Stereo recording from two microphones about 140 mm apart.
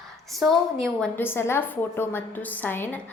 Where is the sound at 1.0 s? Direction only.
15° left (ahead or behind).